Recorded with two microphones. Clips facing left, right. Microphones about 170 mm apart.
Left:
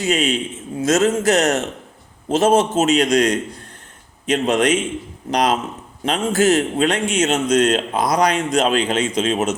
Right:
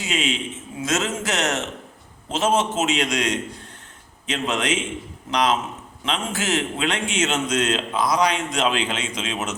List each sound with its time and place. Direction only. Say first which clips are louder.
0.0 s a man's voice: left 6 dB; 45° left (ahead or behind)